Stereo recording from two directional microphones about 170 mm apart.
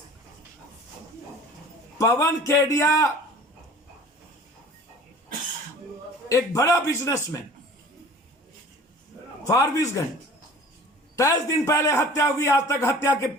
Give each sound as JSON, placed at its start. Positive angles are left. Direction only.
{"t": 2.0, "sound": "a man's voice", "side_deg": 20}
{"t": 6.2, "sound": "a man's voice", "side_deg": 20}
{"t": 9.4, "sound": "a man's voice", "side_deg": 20}
{"t": 11.2, "sound": "a man's voice", "side_deg": 20}